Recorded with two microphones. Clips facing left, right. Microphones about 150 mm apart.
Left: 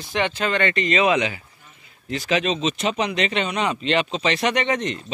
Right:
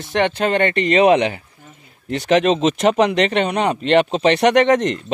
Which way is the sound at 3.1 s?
55° right (ahead or behind).